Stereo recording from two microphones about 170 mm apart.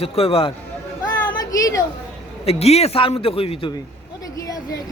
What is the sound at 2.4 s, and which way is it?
A man's voice, 35° left (ahead or behind).